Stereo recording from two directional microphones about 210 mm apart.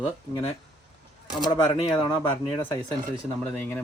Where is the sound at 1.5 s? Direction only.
20° left (ahead or behind).